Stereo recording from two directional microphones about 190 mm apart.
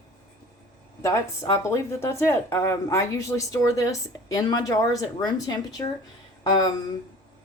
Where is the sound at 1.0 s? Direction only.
15° left (ahead or behind).